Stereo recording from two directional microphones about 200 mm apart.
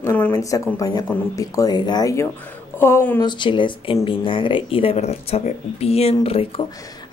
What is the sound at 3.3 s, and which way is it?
Speech, 25° left (ahead or behind).